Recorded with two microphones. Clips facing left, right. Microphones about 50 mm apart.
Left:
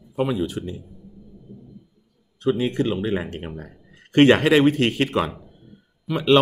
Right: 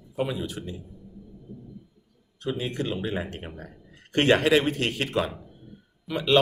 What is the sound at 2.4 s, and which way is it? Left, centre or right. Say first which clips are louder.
Speech: left 8 dB; left.